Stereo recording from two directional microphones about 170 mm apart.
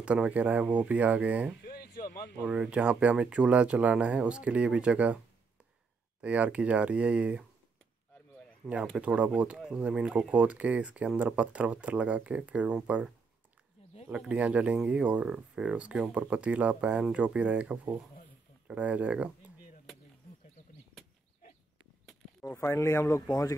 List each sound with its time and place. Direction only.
0.0 s speech: 5° right (ahead or behind)
1.7 s a sound: 65° left (ahead or behind)
2.4 s speech: 5° right (ahead or behind)
6.2 s speech: 10° right (ahead or behind)
8.6 s speech: 5° right (ahead or behind)
22.4 s speech: 15° left (ahead or behind)